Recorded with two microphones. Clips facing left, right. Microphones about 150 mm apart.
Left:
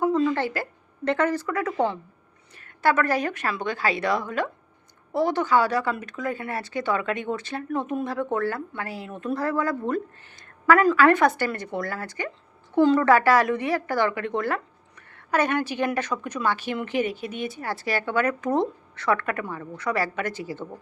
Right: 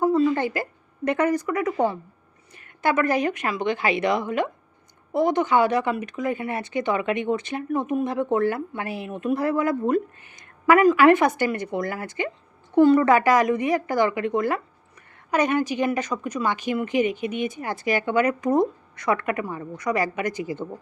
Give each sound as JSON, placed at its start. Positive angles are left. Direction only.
{"t": 0.0, "sound": "a woman's voice", "side_deg": -5}